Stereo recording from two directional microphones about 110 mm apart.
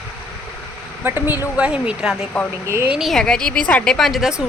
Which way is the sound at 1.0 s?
20° right (ahead or behind).